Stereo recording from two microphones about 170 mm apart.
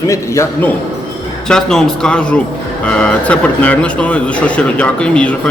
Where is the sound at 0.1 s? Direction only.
15° left (ahead or behind).